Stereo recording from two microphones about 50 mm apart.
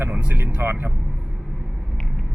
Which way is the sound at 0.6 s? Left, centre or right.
Right.